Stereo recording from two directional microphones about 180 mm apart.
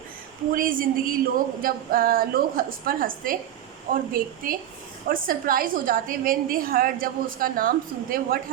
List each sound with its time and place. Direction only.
0.5 s a woman's voice: 50° right (ahead or behind)